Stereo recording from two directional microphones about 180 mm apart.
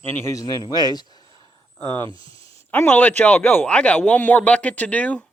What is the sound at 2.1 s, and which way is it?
Speech, 30° right (ahead or behind).